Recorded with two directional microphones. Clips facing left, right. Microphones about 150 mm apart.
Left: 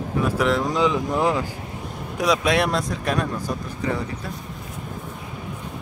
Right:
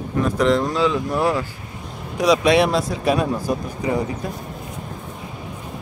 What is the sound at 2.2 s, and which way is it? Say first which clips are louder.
Speech: right 5 dB; centre (ahead or behind).